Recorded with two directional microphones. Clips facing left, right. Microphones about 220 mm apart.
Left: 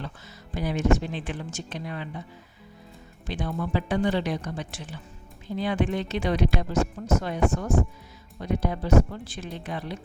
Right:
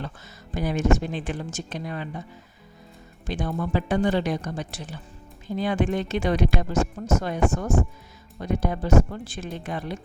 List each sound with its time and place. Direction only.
0.5 s speech: 45° right (ahead or behind)
3.2 s speech: 45° right (ahead or behind)
8.4 s speech: 50° right (ahead or behind)